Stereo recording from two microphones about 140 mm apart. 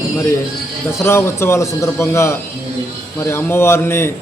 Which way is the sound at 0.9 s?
20° left (ahead or behind).